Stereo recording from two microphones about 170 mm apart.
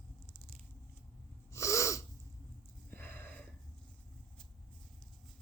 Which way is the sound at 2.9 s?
10° left (ahead or behind).